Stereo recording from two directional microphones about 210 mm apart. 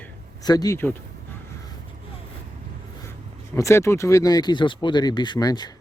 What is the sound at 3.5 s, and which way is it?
Speech, 15° left (ahead or behind).